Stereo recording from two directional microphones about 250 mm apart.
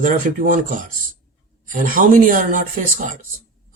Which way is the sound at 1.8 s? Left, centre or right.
Right.